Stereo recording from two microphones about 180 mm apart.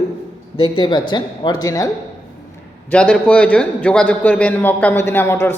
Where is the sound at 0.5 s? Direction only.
25° left (ahead or behind).